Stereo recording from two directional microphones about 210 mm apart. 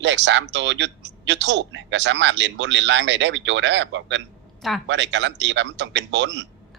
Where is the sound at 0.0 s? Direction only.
60° right (ahead or behind).